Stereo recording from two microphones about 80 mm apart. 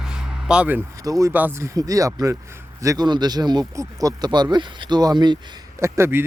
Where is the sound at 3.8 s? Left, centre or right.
Right.